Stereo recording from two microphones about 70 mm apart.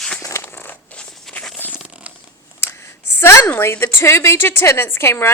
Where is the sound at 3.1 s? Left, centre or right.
Left.